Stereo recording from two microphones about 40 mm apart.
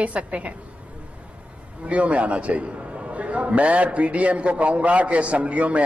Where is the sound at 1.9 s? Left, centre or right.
Right.